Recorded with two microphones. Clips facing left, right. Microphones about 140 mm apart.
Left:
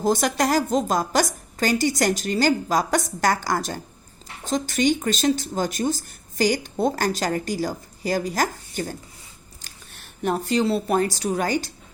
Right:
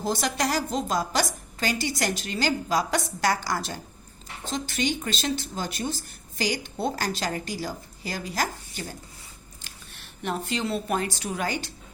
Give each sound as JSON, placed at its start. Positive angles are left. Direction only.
{"t": 0.0, "sound": "speech", "side_deg": 50}